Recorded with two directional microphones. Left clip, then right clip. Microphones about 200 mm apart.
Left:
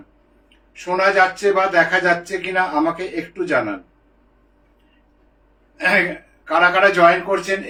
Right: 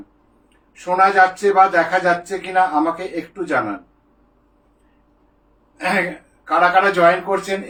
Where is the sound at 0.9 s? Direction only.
25° right (ahead or behind).